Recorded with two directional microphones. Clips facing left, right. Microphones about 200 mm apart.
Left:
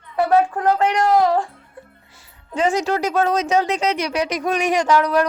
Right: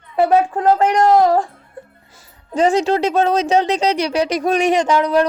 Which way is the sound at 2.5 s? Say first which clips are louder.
Right 4 dB; 35° right (ahead or behind).